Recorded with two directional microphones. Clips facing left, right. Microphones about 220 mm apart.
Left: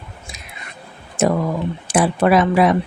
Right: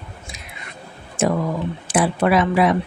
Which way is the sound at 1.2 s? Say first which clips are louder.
Left 2 dB; 40° left (ahead or behind).